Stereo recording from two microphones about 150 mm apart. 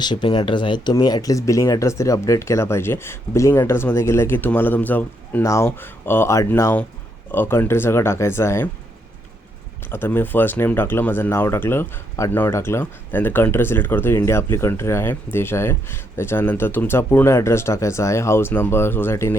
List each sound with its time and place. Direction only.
0.0 s speech: 30° left (ahead or behind)
9.9 s speech: 15° left (ahead or behind)